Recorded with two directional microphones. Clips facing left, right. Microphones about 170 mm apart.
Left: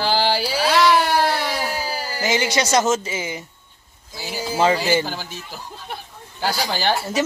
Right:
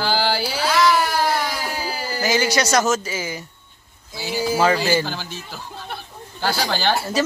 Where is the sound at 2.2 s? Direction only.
25° left (ahead or behind).